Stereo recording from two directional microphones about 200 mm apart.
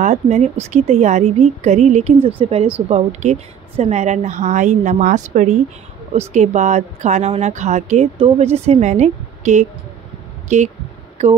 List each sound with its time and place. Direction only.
0.0 s speech: 35° right (ahead or behind)
11.2 s speech: 35° right (ahead or behind)